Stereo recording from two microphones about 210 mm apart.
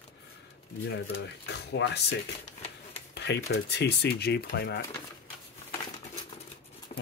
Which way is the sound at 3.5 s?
55° left (ahead or behind).